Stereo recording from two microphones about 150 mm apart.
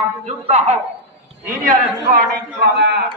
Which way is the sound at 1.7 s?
80° right.